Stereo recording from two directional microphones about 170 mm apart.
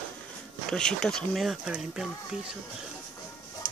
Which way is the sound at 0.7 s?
5° left (ahead or behind).